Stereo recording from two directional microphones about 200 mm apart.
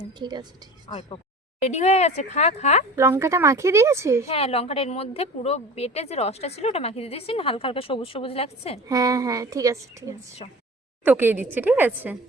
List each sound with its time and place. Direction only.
0.0 s a woman's voice: 20° right (ahead or behind)
0.9 s a woman's voice: 25° left (ahead or behind)
2.9 s a woman's voice: 15° right (ahead or behind)
4.3 s a woman's voice: 30° left (ahead or behind)
8.9 s a woman's voice: 15° right (ahead or behind)